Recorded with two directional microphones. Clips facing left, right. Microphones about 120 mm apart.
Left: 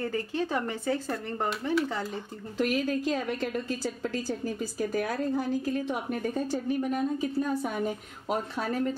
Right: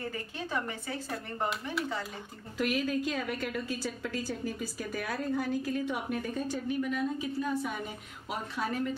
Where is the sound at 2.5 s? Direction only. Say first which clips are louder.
Left 3 dB; 35° left (ahead or behind).